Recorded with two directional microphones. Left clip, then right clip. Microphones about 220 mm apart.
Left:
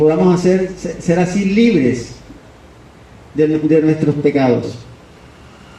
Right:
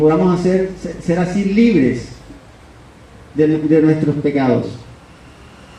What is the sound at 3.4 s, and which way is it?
A man's voice, 50° left (ahead or behind).